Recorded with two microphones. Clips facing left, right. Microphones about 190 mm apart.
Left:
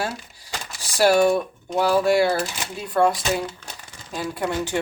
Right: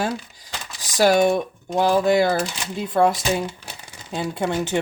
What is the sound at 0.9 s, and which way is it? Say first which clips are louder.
Speech: even; 15° right (ahead or behind).